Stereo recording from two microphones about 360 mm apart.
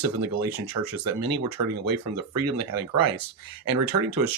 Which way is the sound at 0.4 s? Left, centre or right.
Right.